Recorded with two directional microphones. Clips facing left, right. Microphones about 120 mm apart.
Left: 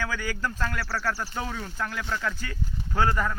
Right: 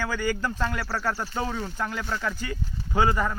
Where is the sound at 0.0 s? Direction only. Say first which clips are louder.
Right 3 dB; 10° right (ahead or behind).